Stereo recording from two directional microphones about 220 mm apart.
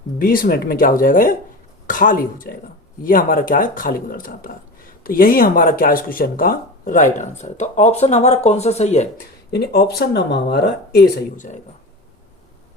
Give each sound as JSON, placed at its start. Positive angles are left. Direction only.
{"t": 0.2, "sound": "speech", "side_deg": 40}
{"t": 9.5, "sound": "speech", "side_deg": 45}